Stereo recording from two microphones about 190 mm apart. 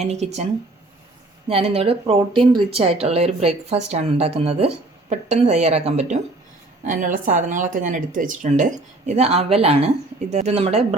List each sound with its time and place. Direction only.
0.0 s speech: 35° right (ahead or behind)
1.5 s speech: 30° right (ahead or behind)